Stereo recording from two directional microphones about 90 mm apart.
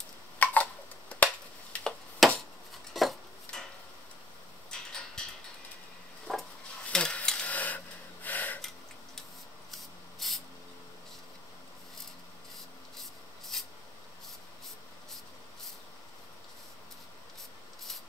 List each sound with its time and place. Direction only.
0.4 s a sound: 15° left (ahead or behind)
1.9 s tick-tock: centre (ahead or behind)
2.9 s dishes: centre (ahead or behind)
4.6 s a sound: 5° left (ahead or behind)
6.3 s a sound: 5° left (ahead or behind)
6.9 s gasp: 10° left (ahead or behind)
8.5 s tick-tock: 5° left (ahead or behind)
9.7 s rub: centre (ahead or behind)
13.5 s spray: 5° left (ahead or behind)